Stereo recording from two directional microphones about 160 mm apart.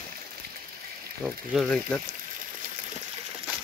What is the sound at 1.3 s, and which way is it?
Speech, 5° left (ahead or behind).